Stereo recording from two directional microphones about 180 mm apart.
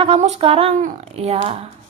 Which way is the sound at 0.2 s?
35° right (ahead or behind).